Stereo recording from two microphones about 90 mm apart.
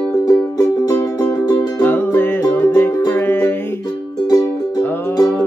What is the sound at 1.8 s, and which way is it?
Music, 25° left (ahead or behind).